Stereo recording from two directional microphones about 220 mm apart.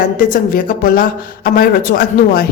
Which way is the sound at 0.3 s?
40° left (ahead or behind).